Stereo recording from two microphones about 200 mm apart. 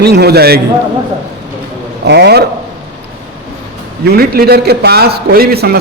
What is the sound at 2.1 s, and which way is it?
Speech, 55° right (ahead or behind).